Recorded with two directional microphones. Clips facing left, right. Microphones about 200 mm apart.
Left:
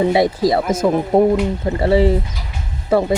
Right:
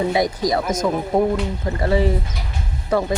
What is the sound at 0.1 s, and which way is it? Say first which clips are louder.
Speech: left 4 dB; 25° left (ahead or behind).